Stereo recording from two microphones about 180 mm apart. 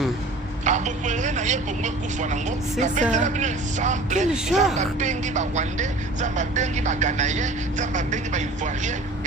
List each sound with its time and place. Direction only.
0.6 s speech: 40° right (ahead or behind)
4.4 s speech: centre (ahead or behind)
4.8 s speech: 40° right (ahead or behind)